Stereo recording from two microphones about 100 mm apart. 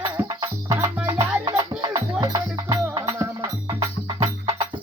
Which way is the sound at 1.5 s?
45° right (ahead or behind).